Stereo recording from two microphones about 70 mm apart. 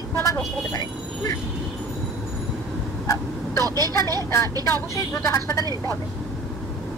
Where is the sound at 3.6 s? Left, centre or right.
Right.